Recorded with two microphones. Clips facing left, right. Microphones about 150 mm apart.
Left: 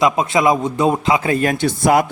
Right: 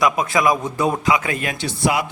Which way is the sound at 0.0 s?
25° left (ahead or behind).